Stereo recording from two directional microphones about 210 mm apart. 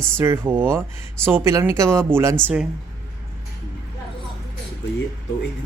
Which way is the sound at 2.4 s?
5° left (ahead or behind).